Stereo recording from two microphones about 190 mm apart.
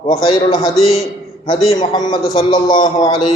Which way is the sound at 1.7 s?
20° left (ahead or behind).